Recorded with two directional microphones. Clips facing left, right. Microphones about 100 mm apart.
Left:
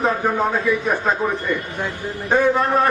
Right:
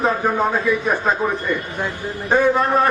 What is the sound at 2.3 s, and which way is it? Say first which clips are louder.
Speech: right 1 dB; 15° right (ahead or behind).